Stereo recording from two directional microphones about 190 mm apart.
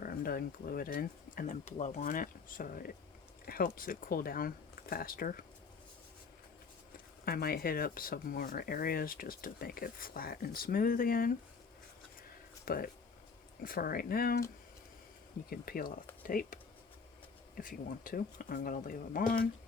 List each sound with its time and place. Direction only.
0.0 s speech: 50° left (ahead or behind)
7.3 s speech: 50° left (ahead or behind)
12.6 s speech: 50° left (ahead or behind)
15.4 s speech: 50° left (ahead or behind)
17.6 s speech: 45° left (ahead or behind)